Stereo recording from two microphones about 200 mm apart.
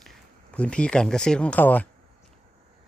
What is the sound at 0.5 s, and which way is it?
Speech, 5° left (ahead or behind).